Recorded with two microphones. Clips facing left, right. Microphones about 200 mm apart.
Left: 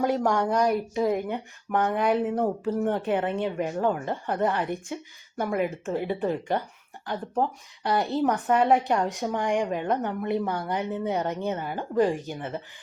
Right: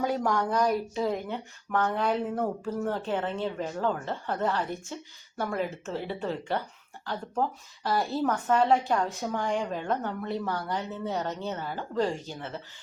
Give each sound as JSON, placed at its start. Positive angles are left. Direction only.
{"t": 0.1, "sound": "speech", "side_deg": 10}